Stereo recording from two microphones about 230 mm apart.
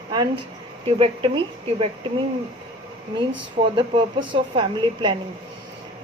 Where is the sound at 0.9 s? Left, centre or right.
Right.